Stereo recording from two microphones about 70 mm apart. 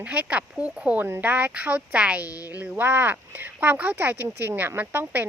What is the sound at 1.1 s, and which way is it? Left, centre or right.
Speech, right.